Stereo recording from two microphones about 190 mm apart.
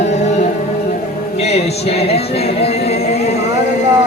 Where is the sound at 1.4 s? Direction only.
35° left (ahead or behind).